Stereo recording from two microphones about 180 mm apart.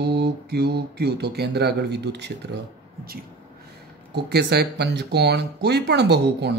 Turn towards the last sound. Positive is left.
turn(degrees=-70)  # may be behind; listen again after turning